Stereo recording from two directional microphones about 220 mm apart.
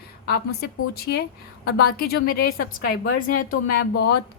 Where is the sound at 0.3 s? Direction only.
45° left (ahead or behind).